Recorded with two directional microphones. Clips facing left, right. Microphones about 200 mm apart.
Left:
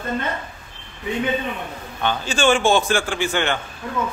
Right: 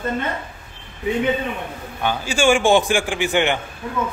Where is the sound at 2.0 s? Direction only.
10° right (ahead or behind).